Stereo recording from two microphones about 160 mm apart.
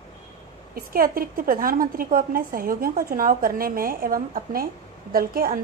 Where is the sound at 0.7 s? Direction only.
65° right (ahead or behind).